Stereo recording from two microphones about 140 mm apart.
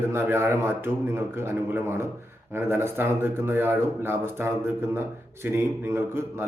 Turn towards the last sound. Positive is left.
turn(degrees=-15)  # may be behind; listen again after turning